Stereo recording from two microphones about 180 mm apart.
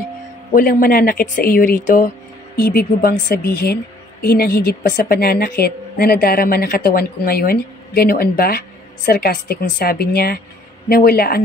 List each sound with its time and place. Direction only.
0.5 s a woman's voice: 50° left (ahead or behind)